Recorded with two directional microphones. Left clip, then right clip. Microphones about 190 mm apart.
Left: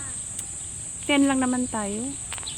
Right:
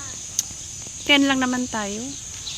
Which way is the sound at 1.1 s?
5° right (ahead or behind).